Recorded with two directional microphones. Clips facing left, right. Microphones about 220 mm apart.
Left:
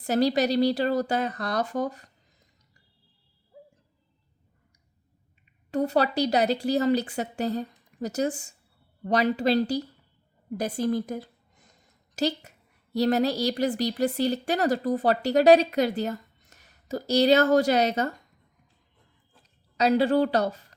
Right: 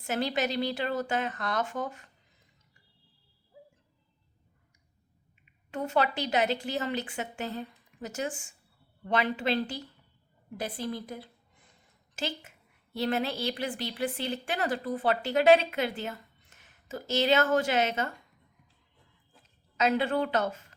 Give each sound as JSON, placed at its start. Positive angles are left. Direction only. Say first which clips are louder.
{"t": 0.0, "sound": "speech", "louder": "left 7 dB", "side_deg": 40}
{"t": 5.7, "sound": "a woman's voice", "louder": "left 5 dB", "side_deg": 35}
{"t": 19.4, "sound": "speech", "louder": "left 3 dB", "side_deg": 35}